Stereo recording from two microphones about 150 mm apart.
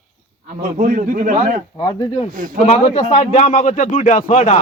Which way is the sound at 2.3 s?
65° right (ahead or behind).